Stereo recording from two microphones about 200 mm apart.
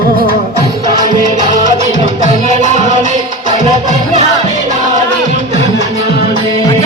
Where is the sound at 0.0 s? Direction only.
45° right (ahead or behind).